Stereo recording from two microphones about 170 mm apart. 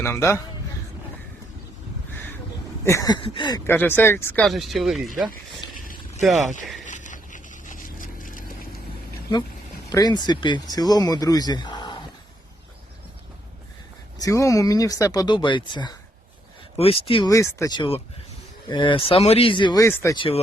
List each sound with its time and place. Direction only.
0.0 s speech: 15° left (ahead or behind)
2.8 s speech: 20° left (ahead or behind)
3.7 s speech: 10° left (ahead or behind)
4.4 s speech: centre (ahead or behind)
6.8 s vehicle: 45° left (ahead or behind)
9.9 s speech: 25° left (ahead or behind)
14.2 s speech: 20° left (ahead or behind)
17.2 s speech: 20° left (ahead or behind)
18.7 s speech: 30° left (ahead or behind)
19.8 s speech: 15° left (ahead or behind)
20.1 s speech: 30° left (ahead or behind)